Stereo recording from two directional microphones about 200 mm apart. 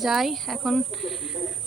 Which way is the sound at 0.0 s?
Centre (ahead or behind).